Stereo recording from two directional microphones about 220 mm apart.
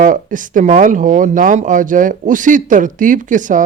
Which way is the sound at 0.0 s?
35° right (ahead or behind).